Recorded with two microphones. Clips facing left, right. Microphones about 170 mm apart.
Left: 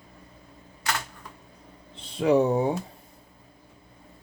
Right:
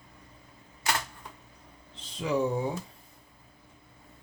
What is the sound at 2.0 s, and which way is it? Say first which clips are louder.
Speech: left 7 dB; 60° left (ahead or behind).